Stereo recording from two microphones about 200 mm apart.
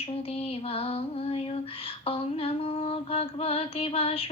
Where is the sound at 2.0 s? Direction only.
30° left (ahead or behind).